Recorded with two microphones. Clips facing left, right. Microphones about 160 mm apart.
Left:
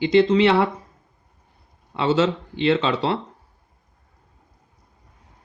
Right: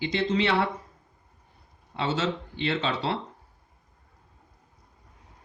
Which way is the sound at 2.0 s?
90° left.